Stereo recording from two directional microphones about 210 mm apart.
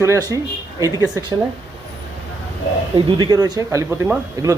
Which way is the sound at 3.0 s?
20° right (ahead or behind).